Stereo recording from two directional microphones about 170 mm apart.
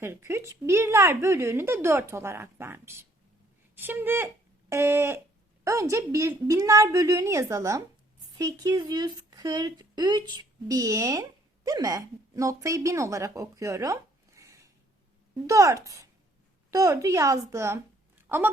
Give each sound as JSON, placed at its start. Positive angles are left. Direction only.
{"t": 0.0, "sound": "speech", "side_deg": -15}